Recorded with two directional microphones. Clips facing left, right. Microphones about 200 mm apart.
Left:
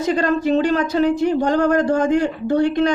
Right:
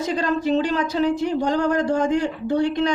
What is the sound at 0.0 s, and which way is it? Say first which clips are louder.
Speech: left 4 dB; 55° left (ahead or behind).